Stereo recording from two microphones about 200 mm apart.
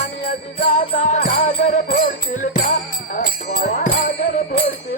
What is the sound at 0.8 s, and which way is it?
Music, 40° left (ahead or behind).